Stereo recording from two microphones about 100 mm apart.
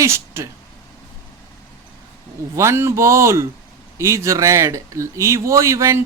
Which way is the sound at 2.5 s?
30° right (ahead or behind).